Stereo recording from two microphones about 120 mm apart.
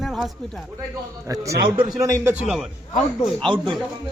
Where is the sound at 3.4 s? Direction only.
40° right (ahead or behind).